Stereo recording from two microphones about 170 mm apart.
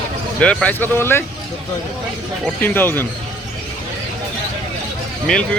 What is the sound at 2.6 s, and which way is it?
Speech, 10° left (ahead or behind).